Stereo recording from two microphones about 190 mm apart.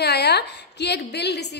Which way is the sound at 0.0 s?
60° left (ahead or behind).